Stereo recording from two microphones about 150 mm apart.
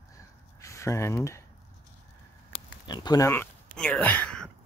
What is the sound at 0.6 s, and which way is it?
Speech, 20° left (ahead or behind).